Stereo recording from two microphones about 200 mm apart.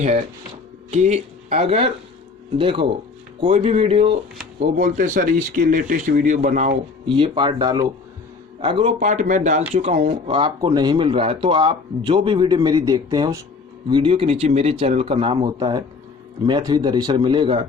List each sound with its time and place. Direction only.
0.9 s speech: 35° right (ahead or behind)
4.8 s speech: 40° right (ahead or behind)
7.2 s speech: 25° right (ahead or behind)